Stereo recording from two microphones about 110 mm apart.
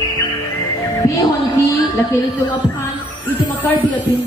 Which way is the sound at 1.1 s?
30° left (ahead or behind).